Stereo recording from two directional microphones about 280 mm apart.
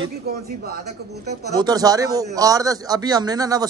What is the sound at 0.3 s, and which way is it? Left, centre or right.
Speech, right.